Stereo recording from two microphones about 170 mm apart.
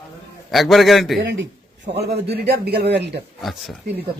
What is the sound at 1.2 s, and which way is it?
Speech, 90° right.